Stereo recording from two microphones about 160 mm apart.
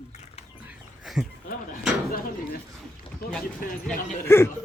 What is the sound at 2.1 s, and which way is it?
Speech, 65° left (ahead or behind).